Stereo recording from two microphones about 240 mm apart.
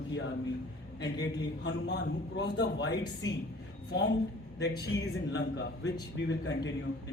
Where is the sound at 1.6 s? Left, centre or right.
Left.